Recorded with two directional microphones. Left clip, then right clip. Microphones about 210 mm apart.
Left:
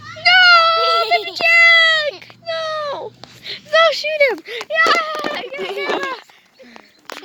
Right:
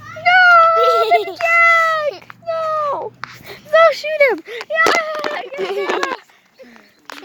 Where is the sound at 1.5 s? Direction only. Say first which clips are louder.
Left 2 dB; 10° left (ahead or behind).